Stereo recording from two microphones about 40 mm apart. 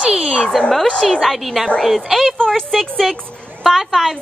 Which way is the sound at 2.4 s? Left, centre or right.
Centre.